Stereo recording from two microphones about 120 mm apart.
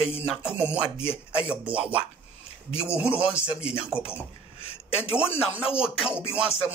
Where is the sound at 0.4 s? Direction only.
10° right (ahead or behind).